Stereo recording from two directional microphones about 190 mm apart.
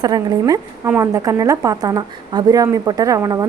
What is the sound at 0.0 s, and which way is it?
A woman's voice, 20° right (ahead or behind).